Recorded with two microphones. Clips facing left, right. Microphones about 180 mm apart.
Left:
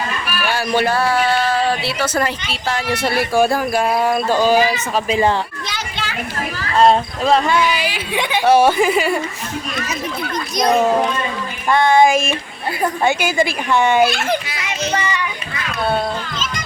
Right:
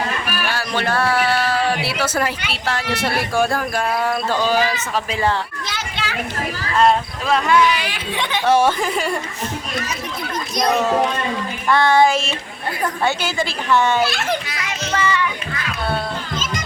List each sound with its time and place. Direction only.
0.5 s speech: 10° left (ahead or behind)
5.6 s children playing: 5° right (ahead or behind)
6.7 s speech: 30° left (ahead or behind)
7.6 s speech: 10° left (ahead or behind)
11.7 s speech: 15° left (ahead or behind)
14.1 s a child's voice: centre (ahead or behind)
14.6 s music: 15° left (ahead or behind)